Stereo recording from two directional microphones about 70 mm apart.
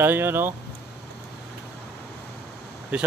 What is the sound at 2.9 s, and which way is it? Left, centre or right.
Speech, centre.